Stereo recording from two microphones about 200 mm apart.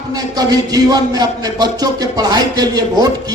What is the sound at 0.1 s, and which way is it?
Speech, 20° right (ahead or behind).